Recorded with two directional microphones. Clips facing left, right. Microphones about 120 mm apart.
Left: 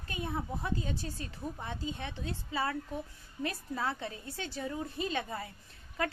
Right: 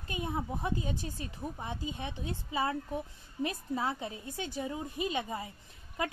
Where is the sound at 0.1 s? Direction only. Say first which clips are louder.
Right 1 dB; 15° right (ahead or behind).